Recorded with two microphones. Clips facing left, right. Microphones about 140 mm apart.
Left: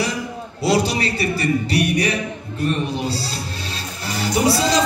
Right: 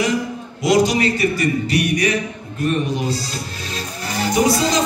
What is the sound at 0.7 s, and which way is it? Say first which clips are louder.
A man's voice: right 3 dB; 35° left (ahead or behind).